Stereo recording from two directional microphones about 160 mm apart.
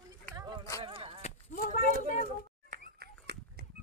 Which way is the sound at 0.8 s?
35° right (ahead or behind).